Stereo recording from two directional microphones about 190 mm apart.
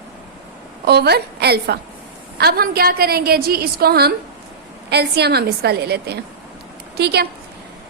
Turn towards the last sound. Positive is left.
turn(degrees=-60)  # may be behind; listen again after turning